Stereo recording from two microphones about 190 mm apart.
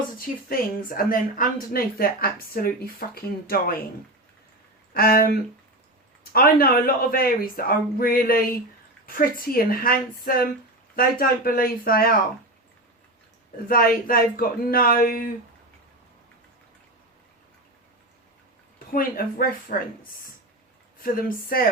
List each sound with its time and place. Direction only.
0.2 s speech: 50° left (ahead or behind)
4.9 s speech: 50° left (ahead or behind)
13.7 s speech: 50° left (ahead or behind)
18.9 s speech: 50° left (ahead or behind)
21.0 s speech: 50° left (ahead or behind)